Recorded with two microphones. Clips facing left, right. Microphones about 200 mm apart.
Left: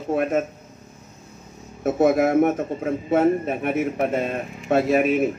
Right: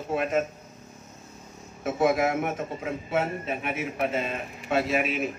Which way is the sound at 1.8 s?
50° left (ahead or behind).